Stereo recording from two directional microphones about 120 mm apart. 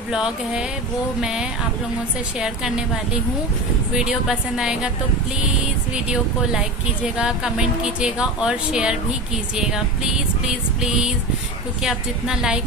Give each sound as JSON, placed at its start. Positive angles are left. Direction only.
{"t": 0.1, "sound": "music", "side_deg": -5}
{"t": 4.0, "sound": "music", "side_deg": -5}
{"t": 6.5, "sound": "a woman's voice", "side_deg": -5}
{"t": 9.6, "sound": "music", "side_deg": -5}